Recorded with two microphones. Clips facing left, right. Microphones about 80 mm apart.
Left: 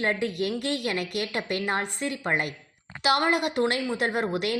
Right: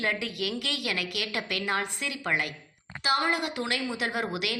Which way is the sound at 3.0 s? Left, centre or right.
Left.